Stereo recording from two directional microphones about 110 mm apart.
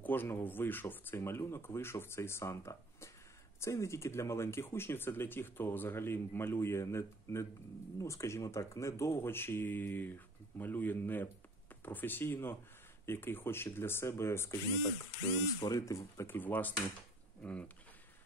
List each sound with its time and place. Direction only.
0.0 s speech: 20° left (ahead or behind)
15.6 s speech: 30° left (ahead or behind); by 17.6 s 10° left (ahead or behind)